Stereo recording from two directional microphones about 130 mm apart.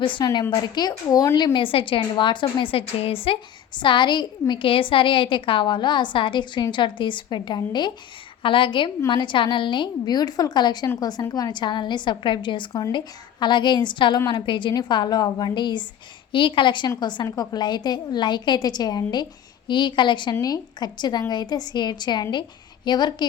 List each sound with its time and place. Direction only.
0.0 s a woman's voice: 40° left (ahead or behind)
1.5 s a woman's voice: 40° left (ahead or behind)